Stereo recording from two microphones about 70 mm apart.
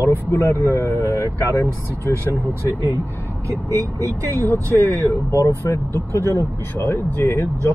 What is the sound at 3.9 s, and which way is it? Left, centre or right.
Speech, left.